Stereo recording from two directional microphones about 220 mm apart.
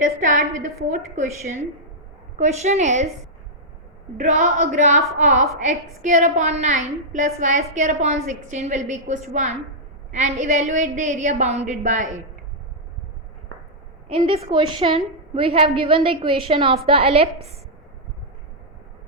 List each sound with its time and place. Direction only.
0.0 s a woman's voice: 40° right (ahead or behind)
2.4 s a woman's voice: 30° right (ahead or behind)
4.2 s a woman's voice: 35° right (ahead or behind)
14.1 s a woman's voice: 25° right (ahead or behind)